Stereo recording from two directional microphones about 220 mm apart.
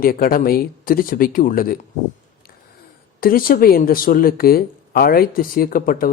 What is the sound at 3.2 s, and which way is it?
Speech, 40° left (ahead or behind).